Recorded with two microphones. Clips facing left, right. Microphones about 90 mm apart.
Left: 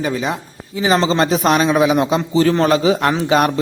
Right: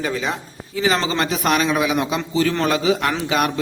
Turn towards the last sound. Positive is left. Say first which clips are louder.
# left 5 dB
turn(degrees=35)  # may be behind; listen again after turning